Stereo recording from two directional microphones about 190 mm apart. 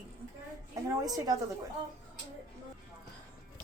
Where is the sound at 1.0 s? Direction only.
20° right (ahead or behind).